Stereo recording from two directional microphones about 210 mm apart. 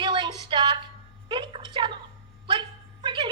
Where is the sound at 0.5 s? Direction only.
25° right (ahead or behind).